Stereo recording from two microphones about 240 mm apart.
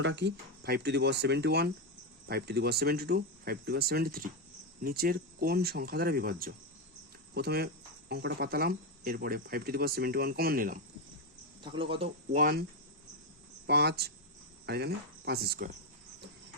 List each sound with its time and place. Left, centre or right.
0.0 s speech: right
11.6 s speech: right
13.7 s speech: right